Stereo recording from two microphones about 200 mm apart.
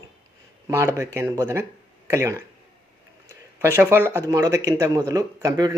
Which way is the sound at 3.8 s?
10° right (ahead or behind).